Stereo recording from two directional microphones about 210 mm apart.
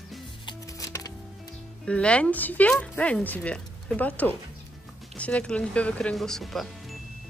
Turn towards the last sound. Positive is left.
turn(degrees=0)  # may be behind; listen again after turning